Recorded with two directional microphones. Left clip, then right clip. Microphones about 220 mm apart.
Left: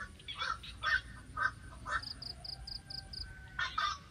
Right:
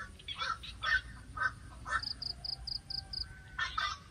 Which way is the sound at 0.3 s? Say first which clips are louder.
Right 1 dB; 20° right (ahead or behind).